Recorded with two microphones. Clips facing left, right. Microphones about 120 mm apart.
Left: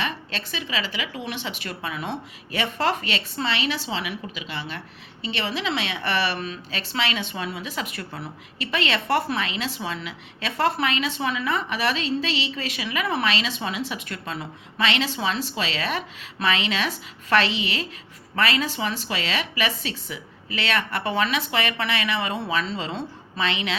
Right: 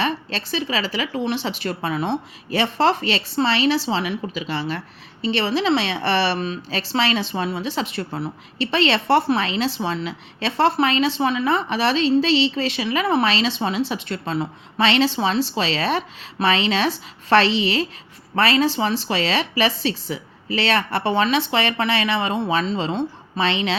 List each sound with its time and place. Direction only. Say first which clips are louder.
0.0 s a woman's voice: right 6 dB; 35° right (ahead or behind)